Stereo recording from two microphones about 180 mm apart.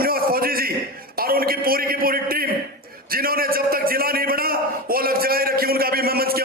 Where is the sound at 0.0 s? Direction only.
55° right (ahead or behind).